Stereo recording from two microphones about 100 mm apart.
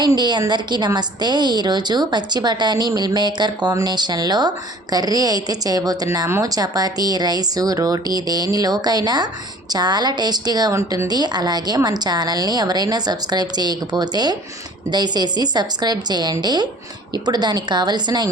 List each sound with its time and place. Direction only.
0.2 s a woman's voice: 45° right (ahead or behind)
10.7 s speech: 30° right (ahead or behind)
11.1 s a woman's voice: 45° right (ahead or behind)